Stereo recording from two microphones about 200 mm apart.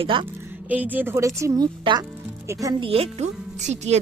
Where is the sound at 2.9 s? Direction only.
30° right (ahead or behind).